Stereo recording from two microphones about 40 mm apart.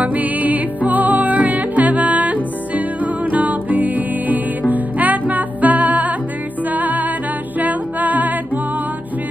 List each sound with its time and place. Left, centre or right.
0.0 s music: right